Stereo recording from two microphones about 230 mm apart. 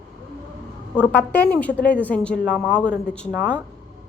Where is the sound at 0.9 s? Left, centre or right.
Centre.